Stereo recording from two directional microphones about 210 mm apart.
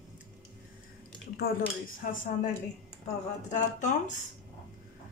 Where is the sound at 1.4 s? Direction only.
70° left (ahead or behind).